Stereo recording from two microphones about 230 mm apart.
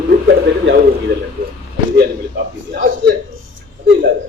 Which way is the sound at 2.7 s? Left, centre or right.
Right.